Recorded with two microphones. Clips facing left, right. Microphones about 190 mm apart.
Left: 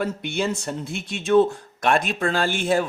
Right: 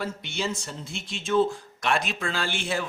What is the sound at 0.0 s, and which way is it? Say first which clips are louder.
Speech: left 6 dB; 55° left (ahead or behind).